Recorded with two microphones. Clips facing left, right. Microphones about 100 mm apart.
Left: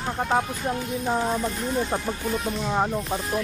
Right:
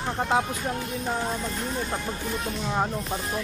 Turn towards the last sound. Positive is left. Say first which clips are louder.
# left 3 dB
turn(degrees=5)  # may be behind; listen again after turning